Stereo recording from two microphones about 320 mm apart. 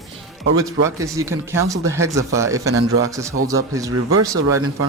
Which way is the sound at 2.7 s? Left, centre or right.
Right.